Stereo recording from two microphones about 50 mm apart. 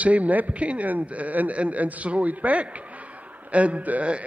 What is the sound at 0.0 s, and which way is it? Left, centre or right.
A man's voice, right.